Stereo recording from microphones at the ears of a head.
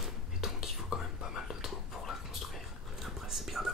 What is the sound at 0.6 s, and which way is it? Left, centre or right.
Whispering, left.